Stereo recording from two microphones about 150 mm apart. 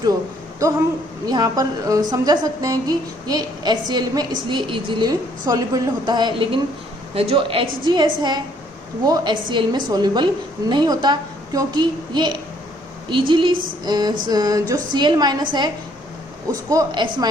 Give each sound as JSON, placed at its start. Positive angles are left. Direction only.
{"t": 1.2, "sound": "a woman's voice", "side_deg": -25}